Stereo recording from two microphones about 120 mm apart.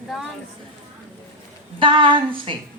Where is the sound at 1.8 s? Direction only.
45° right (ahead or behind).